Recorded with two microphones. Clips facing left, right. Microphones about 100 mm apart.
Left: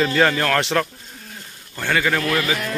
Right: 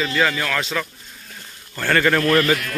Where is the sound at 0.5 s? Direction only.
65° left (ahead or behind).